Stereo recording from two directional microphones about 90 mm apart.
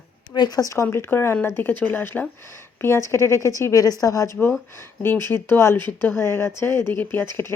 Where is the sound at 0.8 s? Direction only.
25° left (ahead or behind).